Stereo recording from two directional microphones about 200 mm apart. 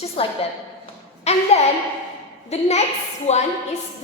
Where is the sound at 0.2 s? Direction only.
30° left (ahead or behind).